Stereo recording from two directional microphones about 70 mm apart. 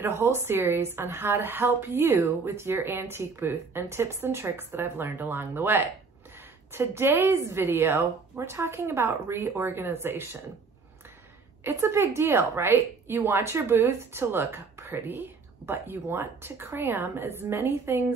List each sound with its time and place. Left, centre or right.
0.0 s a woman's voice: right
11.6 s a woman's voice: right